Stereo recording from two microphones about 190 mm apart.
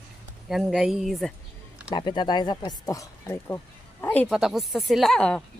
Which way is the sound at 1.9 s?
25° left (ahead or behind).